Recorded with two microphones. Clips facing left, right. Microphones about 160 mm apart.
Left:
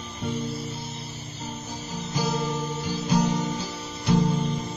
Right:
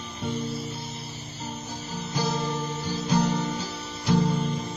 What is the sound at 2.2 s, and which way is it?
Music, 10° left (ahead or behind).